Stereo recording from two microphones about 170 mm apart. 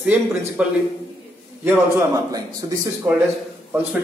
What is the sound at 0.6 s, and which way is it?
Speech, 5° right (ahead or behind).